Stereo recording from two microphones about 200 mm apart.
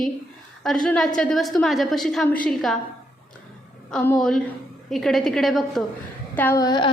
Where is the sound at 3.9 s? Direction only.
5° left (ahead or behind).